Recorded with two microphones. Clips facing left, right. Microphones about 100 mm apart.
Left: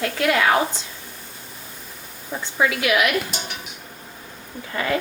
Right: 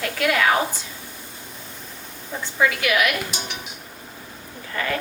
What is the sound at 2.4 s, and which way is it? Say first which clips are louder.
Speech: even; 20° left (ahead or behind).